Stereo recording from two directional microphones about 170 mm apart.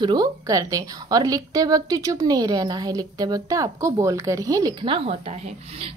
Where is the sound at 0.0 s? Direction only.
25° right (ahead or behind).